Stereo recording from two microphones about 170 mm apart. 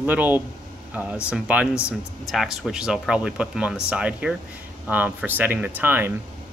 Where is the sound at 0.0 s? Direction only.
10° right (ahead or behind).